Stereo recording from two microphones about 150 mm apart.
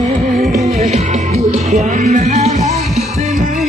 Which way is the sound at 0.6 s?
50° right (ahead or behind).